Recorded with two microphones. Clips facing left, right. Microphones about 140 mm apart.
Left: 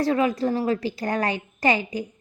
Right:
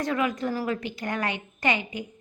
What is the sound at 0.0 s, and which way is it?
Speech, 30° left (ahead or behind).